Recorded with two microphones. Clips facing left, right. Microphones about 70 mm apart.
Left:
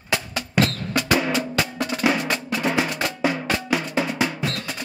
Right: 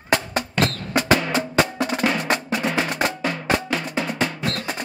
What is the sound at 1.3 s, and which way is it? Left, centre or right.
Percussion, right.